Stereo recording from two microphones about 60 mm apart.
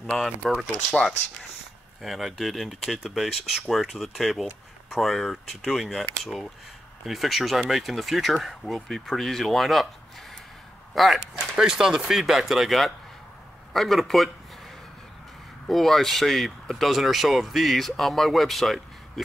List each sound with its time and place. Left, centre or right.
0.1 s speech: centre
11.0 s speech: centre
15.6 s speech: centre